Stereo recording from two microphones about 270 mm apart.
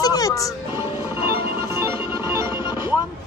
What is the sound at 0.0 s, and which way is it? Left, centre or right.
Music, centre.